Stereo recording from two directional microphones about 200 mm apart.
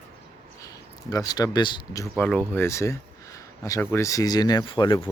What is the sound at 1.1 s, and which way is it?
Speech, 20° left (ahead or behind).